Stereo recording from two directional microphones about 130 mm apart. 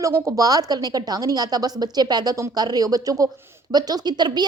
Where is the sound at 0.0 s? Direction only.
25° right (ahead or behind).